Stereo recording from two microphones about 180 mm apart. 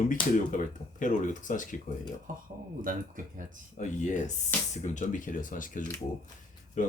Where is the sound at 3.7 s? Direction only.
40° left (ahead or behind).